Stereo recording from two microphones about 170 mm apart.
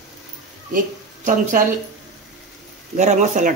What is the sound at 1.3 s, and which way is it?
Speech, 50° right (ahead or behind).